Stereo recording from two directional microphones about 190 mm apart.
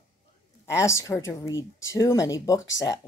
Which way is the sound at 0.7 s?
15° left (ahead or behind).